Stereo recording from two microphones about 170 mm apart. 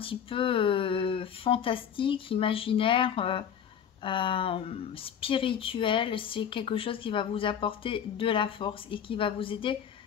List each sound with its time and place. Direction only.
0.0 s speech: 30° left (ahead or behind)